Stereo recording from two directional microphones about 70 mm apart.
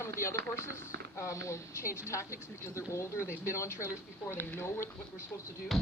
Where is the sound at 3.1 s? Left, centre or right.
Left.